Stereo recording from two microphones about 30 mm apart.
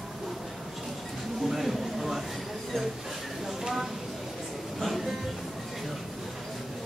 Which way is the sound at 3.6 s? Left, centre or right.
Centre.